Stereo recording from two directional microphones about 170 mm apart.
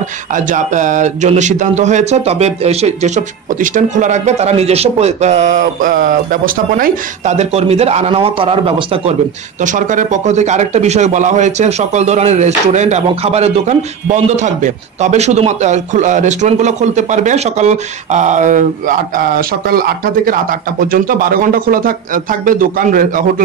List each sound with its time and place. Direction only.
0.3 s speech: 45° right (ahead or behind)
9.6 s speech: 50° right (ahead or behind)